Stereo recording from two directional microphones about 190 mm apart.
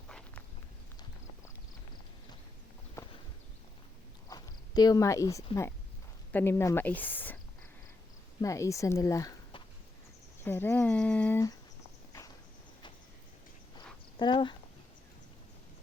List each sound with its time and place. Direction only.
0.1 s walk: 5° left (ahead or behind)
4.3 s a sound: 20° left (ahead or behind)
6.3 s speech: 10° left (ahead or behind)
8.4 s speech: 15° left (ahead or behind)
10.4 s speech: 10° left (ahead or behind)
13.7 s a sound: 25° left (ahead or behind)